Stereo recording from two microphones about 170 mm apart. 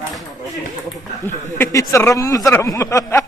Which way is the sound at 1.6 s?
15° left (ahead or behind).